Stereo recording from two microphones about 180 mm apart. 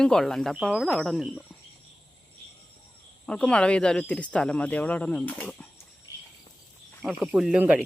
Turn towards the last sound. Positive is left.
turn(degrees=-10)  # may be behind; listen again after turning